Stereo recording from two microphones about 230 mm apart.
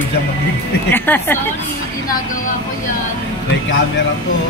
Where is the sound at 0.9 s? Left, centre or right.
Centre.